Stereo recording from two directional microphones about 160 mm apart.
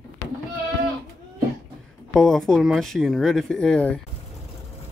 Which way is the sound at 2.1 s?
5° left (ahead or behind).